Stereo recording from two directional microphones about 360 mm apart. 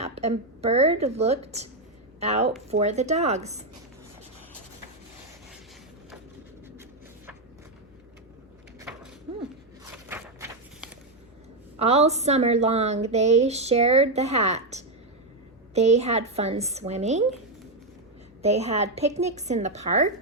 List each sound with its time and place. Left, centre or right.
0.0 s a woman's voice: centre
9.9 s a sound: centre
11.8 s a woman's voice: centre
18.4 s a woman's voice: centre